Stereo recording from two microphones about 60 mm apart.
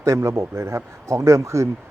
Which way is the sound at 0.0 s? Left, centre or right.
Right.